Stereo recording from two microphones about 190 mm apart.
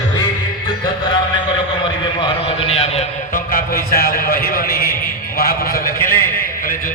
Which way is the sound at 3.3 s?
50° left (ahead or behind).